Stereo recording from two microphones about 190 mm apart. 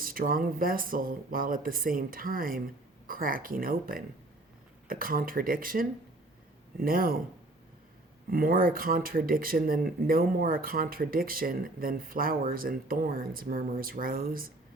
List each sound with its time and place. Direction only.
0.0 s speech: 50° right (ahead or behind)
8.3 s speech: 50° right (ahead or behind)